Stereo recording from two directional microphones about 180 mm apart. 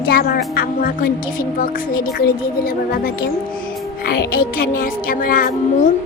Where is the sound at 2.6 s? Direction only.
55° left (ahead or behind).